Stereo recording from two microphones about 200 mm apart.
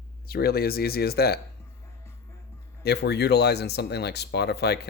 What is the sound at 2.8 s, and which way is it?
Speech, 55° left (ahead or behind).